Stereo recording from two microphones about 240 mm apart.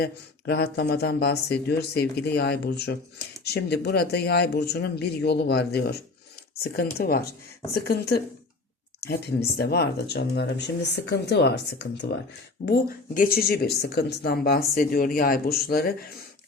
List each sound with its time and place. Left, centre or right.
0.0 s a woman's voice: left